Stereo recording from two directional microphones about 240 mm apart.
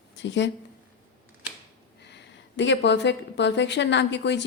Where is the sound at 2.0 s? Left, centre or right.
Left.